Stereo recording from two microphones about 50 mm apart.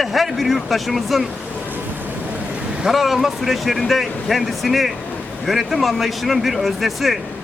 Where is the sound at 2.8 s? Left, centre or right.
Centre.